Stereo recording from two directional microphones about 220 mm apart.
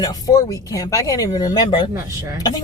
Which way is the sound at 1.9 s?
15° right (ahead or behind).